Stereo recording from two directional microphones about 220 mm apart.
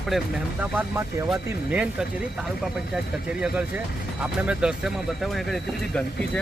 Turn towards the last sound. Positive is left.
turn(degrees=0)  # may be behind; listen again after turning